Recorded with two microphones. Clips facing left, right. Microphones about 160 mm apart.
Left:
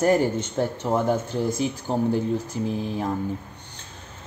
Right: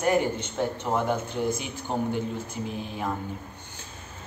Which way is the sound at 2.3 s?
35° left (ahead or behind).